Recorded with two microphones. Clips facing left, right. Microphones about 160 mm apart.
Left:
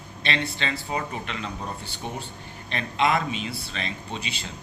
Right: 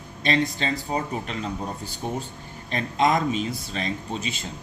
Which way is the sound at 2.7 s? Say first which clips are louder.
Right 2 dB; 45° right (ahead or behind).